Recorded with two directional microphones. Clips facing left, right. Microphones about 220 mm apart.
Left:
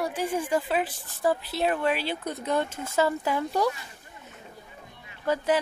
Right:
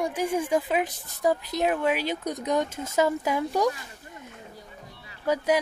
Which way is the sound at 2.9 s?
10° right (ahead or behind).